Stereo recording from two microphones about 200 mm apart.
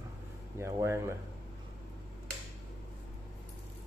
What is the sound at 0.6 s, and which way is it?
Speech, 15° right (ahead or behind).